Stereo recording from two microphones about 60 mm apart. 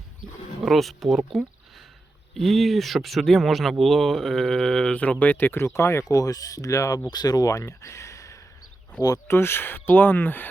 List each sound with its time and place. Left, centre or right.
0.6 s speech: centre
5.2 s speech: left
6.1 s speech: left
7.8 s a sound: left
9.1 s speech: left